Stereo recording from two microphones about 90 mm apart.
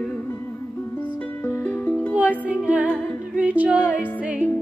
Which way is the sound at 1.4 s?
20° left (ahead or behind).